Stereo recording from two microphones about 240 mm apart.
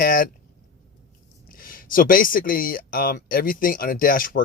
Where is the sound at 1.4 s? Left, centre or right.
Left.